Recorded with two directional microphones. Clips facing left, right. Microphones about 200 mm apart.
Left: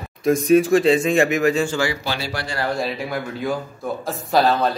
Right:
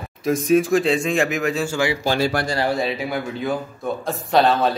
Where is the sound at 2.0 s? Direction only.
50° right (ahead or behind).